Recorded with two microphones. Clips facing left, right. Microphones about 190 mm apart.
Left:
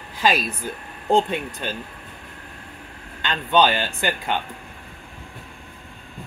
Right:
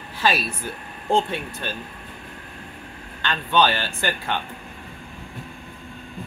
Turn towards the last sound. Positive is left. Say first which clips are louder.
# left 2 dB
turn(degrees=15)  # may be behind; listen again after turning